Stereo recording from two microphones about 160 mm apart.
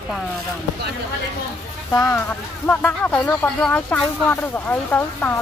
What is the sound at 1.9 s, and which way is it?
Speech, 20° left (ahead or behind).